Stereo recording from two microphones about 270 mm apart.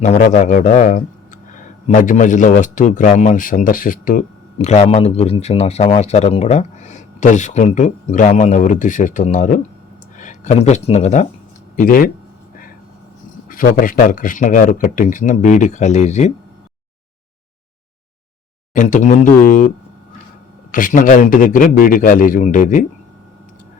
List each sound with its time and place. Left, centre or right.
0.3 s speech: left
13.5 s speech: left
18.7 s speech: left
20.7 s speech: left